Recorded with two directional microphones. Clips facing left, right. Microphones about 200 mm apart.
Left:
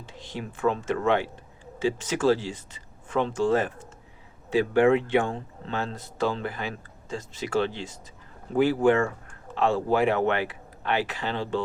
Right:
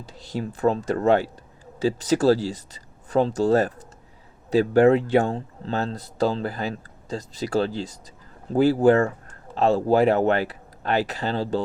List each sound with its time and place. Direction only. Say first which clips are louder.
0.0 s speech: right 6 dB; 40° right (ahead or behind)